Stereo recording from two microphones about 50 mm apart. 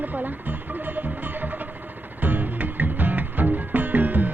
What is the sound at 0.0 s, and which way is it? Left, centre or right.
Music, right.